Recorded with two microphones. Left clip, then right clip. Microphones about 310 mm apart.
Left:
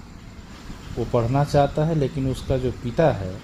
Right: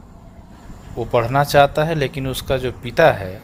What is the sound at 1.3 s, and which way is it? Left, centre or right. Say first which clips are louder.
Speech: right 8 dB; right.